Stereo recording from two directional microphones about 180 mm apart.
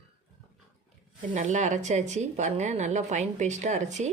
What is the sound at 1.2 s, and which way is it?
A woman's voice, 45° right (ahead or behind).